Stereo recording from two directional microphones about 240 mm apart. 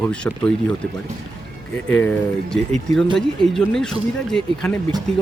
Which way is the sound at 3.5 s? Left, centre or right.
Centre.